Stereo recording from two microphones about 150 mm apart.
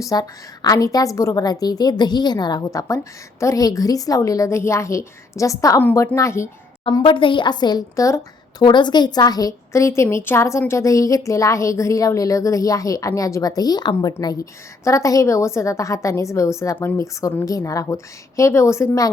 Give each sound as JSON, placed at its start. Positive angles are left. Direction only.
{"t": 0.0, "sound": "a woman's voice", "side_deg": 25}
{"t": 7.0, "sound": "a woman's voice", "side_deg": 35}